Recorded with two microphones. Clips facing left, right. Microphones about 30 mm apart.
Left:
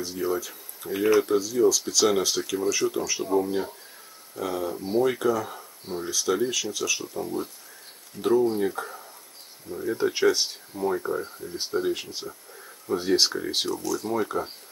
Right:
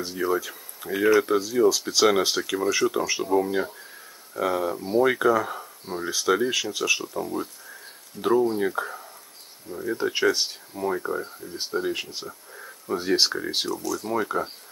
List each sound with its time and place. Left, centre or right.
0.0 s speech: centre
1.4 s speech: right
4.4 s speech: right
12.5 s a sound: centre
13.1 s speech: centre
13.7 s speech: centre
14.1 s speech: centre